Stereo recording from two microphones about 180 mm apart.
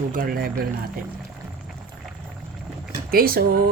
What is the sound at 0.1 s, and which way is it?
Speech, 55° right (ahead or behind).